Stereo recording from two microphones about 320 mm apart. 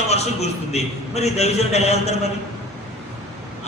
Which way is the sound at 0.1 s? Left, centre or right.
Centre.